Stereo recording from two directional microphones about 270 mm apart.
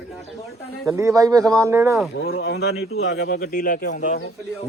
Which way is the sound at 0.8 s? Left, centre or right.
Centre.